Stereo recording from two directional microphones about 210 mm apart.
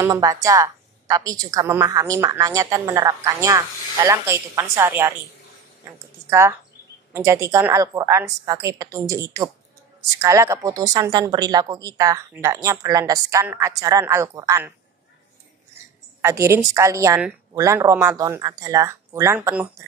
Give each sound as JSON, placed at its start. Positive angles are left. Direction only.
{"t": 0.0, "sound": "a woman's voice", "side_deg": -15}
{"t": 7.1, "sound": "a woman's voice", "side_deg": -15}
{"t": 16.2, "sound": "a woman's voice", "side_deg": -15}